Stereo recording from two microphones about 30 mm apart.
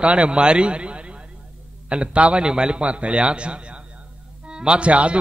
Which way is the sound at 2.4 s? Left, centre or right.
Right.